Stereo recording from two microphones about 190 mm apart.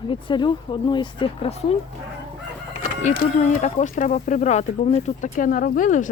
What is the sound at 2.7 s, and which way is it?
Speech, 45° left (ahead or behind).